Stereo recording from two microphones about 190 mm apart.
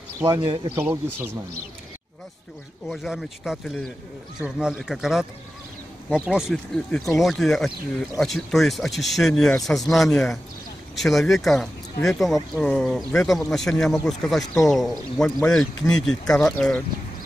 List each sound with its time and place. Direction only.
0.4 s a man's voice: 25° right (ahead or behind)
0.7 s speech: 10° right (ahead or behind)
2.9 s speech: centre (ahead or behind)
6.2 s speech: centre (ahead or behind)